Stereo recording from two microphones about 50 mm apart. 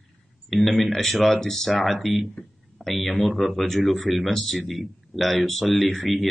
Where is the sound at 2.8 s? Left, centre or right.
Centre.